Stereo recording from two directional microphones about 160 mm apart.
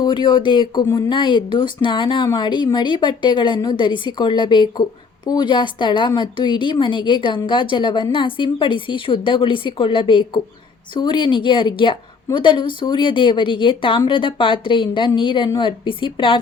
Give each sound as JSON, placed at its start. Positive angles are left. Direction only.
{"t": 0.0, "sound": "a woman's voice", "side_deg": 30}